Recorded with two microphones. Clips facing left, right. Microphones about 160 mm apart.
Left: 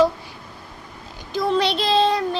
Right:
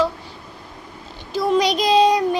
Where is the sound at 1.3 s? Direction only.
10° right (ahead or behind).